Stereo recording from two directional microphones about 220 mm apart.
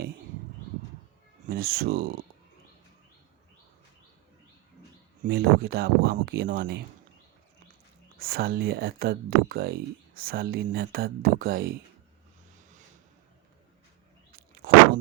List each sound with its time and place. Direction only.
1.5 s speech: 45° right (ahead or behind)
5.2 s speech: 45° right (ahead or behind)
8.2 s speech: 45° right (ahead or behind)